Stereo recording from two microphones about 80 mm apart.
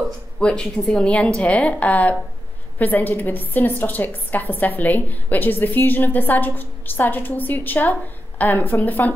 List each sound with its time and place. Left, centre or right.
0.4 s a woman's voice: centre